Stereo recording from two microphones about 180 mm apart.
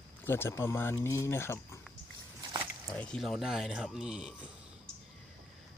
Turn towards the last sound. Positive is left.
turn(degrees=-5)  # may be behind; listen again after turning